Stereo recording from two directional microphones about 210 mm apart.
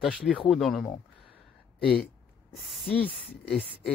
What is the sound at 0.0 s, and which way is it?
Speech, centre (ahead or behind).